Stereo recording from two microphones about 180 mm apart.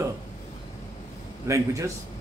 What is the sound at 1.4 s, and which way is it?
Speech, 15° right (ahead or behind).